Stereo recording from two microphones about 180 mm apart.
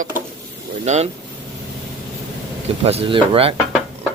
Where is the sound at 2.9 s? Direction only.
30° right (ahead or behind).